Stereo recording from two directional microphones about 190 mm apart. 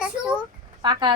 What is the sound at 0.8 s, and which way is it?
Speech, 25° right (ahead or behind).